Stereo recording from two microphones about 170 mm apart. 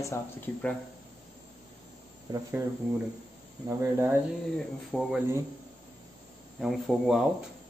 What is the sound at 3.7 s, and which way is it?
Speech, 15° right (ahead or behind).